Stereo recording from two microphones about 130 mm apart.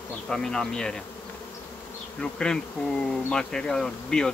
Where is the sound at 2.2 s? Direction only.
5° left (ahead or behind).